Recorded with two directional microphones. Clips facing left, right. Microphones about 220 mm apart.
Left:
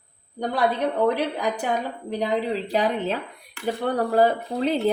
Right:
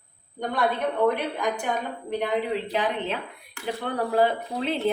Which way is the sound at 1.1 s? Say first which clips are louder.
Left 2 dB; 35° left (ahead or behind).